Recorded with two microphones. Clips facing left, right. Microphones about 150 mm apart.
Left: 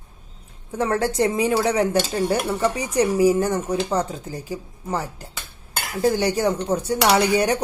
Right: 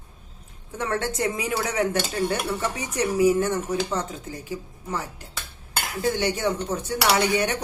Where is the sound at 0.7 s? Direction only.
35° left (ahead or behind).